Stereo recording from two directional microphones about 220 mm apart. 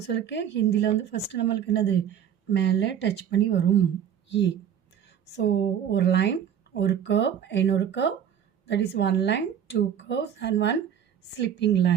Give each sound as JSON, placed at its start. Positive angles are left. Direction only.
{"t": 0.0, "sound": "speech", "side_deg": 50}